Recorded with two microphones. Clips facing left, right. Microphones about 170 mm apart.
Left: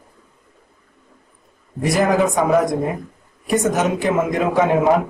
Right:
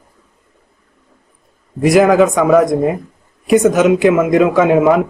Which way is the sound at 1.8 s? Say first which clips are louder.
Right 7 dB; 90° right.